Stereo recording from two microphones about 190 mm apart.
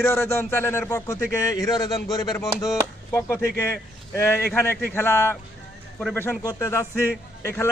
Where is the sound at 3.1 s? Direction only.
10° left (ahead or behind).